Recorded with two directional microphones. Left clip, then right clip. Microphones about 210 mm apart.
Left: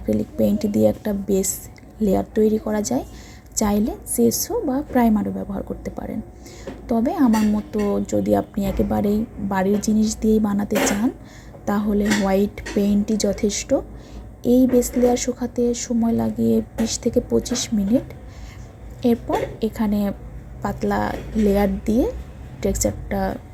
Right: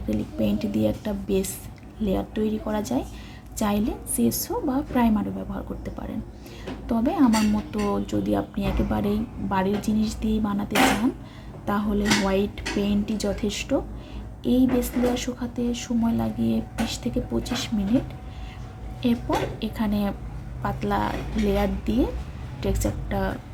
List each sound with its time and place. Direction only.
0.1 s speech: 25° left (ahead or behind)
19.0 s speech: 20° left (ahead or behind)